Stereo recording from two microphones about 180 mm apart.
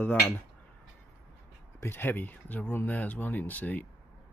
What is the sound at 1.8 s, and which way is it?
Speech, 10° left (ahead or behind).